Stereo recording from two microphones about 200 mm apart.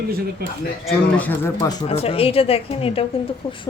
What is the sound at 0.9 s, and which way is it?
Speech, 5° left (ahead or behind).